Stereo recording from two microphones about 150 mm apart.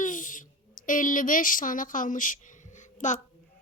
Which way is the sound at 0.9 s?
60° left (ahead or behind).